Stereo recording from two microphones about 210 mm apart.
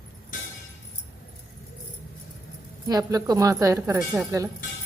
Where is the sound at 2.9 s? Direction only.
20° right (ahead or behind).